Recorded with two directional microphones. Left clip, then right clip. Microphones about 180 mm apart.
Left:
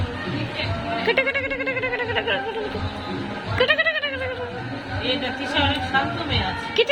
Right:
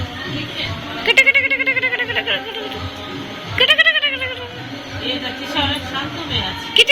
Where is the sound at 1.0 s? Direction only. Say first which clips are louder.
Right 10 dB; 15° left (ahead or behind).